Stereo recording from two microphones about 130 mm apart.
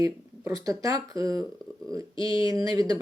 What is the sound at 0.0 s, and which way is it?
Speech, 25° right (ahead or behind).